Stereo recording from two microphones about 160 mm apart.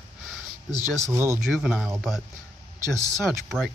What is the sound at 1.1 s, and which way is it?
Speech, 15° right (ahead or behind).